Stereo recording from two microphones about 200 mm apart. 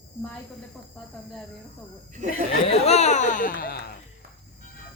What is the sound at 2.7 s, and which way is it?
Speech, 35° left (ahead or behind).